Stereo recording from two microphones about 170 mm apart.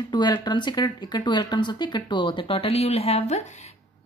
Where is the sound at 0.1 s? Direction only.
25° left (ahead or behind).